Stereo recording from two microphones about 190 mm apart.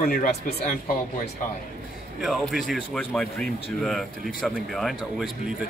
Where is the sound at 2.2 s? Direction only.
Centre (ahead or behind).